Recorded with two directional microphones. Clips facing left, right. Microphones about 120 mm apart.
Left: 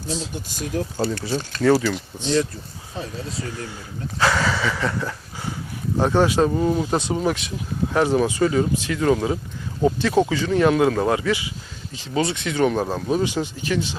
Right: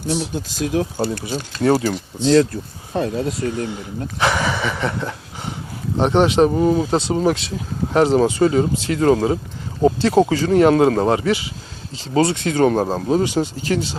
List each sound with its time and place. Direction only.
0.1 s speech: 80° right
1.5 s speech: 25° right (ahead or behind)
2.2 s speech: 90° right
2.5 s speech: 60° right (ahead or behind)
3.5 s speech: 20° right (ahead or behind)